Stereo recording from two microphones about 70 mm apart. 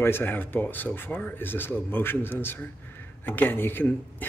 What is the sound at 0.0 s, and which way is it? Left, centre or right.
Speech, left.